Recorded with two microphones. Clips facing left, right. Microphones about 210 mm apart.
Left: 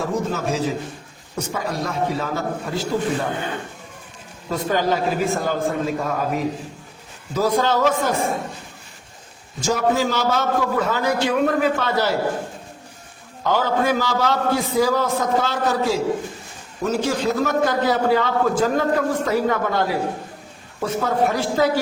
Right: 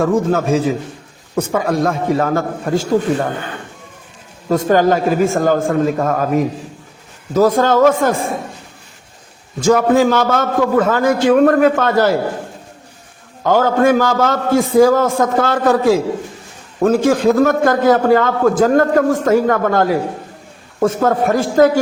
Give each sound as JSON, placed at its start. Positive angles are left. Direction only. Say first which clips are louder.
{"t": 0.0, "sound": "a man's voice", "louder": "right 8 dB", "side_deg": -55}
{"t": 4.4, "sound": "a man's voice", "louder": "right 8 dB", "side_deg": -45}
{"t": 9.6, "sound": "a man's voice", "louder": "right 8 dB", "side_deg": -55}
{"t": 13.4, "sound": "a man's voice", "louder": "right 7 dB", "side_deg": -50}